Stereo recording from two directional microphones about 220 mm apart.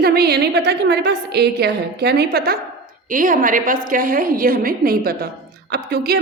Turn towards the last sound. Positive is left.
turn(degrees=-45)  # may be behind; listen again after turning